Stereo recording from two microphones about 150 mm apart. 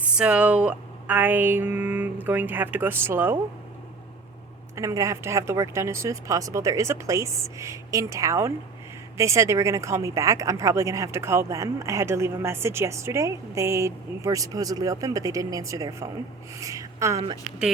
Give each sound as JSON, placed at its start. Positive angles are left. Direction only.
{"t": 0.0, "sound": "speech", "side_deg": -5}
{"t": 4.7, "sound": "a woman's voice", "side_deg": -20}